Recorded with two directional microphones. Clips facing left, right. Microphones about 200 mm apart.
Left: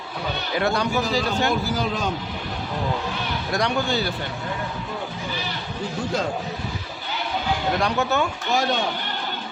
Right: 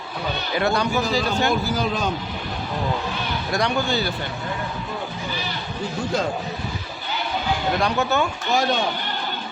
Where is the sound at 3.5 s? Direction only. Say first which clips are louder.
Right 1 dB; centre (ahead or behind).